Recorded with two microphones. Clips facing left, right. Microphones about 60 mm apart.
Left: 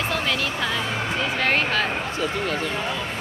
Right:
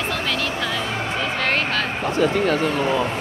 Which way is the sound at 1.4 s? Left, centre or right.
Centre.